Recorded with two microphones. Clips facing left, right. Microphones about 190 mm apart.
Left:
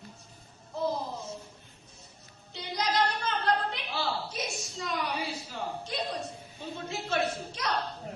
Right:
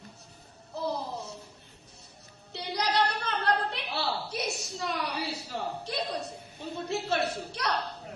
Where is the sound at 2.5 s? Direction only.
70° right (ahead or behind).